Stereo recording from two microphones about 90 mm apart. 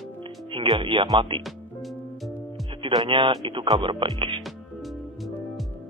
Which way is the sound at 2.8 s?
70° right (ahead or behind).